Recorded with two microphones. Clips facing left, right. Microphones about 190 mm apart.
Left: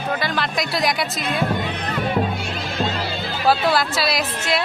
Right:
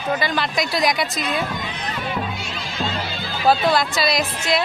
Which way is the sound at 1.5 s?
60° left (ahead or behind).